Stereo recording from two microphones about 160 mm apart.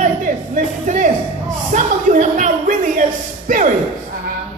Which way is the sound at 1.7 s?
50° right (ahead or behind).